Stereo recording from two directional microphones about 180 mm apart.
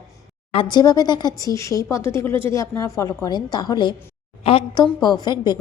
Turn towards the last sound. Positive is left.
turn(degrees=20)  # may be behind; listen again after turning